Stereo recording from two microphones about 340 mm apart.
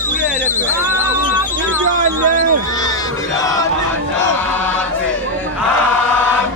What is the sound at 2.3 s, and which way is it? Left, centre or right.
Speech, right.